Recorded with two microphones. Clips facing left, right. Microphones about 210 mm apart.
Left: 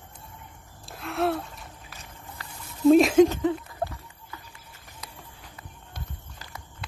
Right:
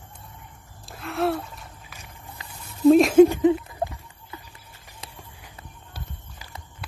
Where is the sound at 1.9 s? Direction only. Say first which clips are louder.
Even; 10° right (ahead or behind).